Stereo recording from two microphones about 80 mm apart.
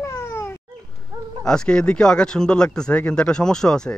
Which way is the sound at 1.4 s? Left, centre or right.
Centre.